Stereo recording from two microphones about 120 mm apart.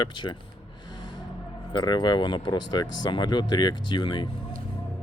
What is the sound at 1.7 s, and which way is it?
Speech, 35° left (ahead or behind).